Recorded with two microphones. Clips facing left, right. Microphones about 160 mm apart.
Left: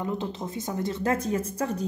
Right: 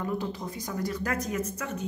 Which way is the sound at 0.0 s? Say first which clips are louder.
Left 1 dB; 20° left (ahead or behind).